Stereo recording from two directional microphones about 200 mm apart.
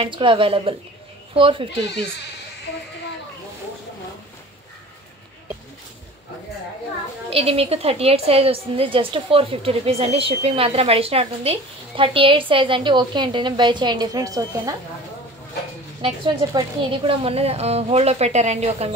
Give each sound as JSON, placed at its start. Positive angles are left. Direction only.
{"t": 0.0, "sound": "a woman's voice", "side_deg": -25}
{"t": 7.2, "sound": "a woman's voice", "side_deg": -30}
{"t": 16.0, "sound": "a woman's voice", "side_deg": -25}